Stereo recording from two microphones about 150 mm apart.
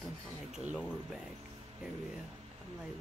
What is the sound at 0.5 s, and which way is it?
Speech, centre (ahead or behind).